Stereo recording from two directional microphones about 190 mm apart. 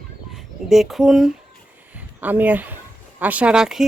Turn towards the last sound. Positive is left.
turn(degrees=-5)  # may be behind; listen again after turning